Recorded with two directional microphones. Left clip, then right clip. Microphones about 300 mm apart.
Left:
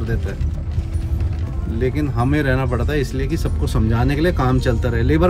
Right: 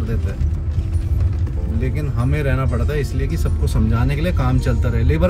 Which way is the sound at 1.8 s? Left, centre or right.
Centre.